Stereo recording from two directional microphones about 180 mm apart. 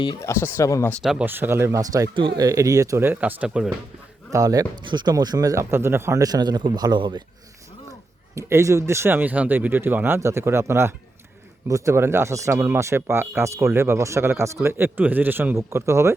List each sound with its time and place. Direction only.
0.0 s speech: 20° left (ahead or behind)
1.0 s speech: 5° right (ahead or behind)
4.3 s speech: 20° right (ahead or behind)
8.4 s speech: 15° right (ahead or behind)